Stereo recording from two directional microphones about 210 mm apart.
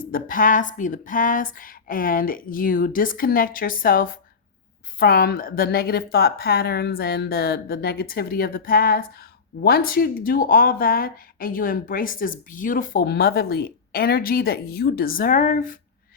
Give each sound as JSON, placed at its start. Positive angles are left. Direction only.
{"t": 0.0, "sound": "speech", "side_deg": 40}